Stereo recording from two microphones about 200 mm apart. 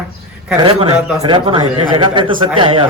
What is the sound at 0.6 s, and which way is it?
A man's voice, 25° right (ahead or behind).